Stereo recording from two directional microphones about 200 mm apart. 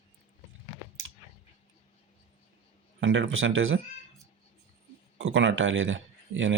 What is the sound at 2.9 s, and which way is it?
Speech, 70° right (ahead or behind).